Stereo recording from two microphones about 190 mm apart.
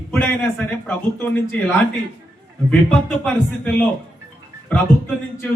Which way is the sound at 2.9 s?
5° left (ahead or behind).